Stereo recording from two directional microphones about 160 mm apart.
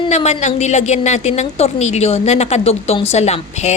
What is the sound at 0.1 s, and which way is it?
A woman's voice, 45° left (ahead or behind).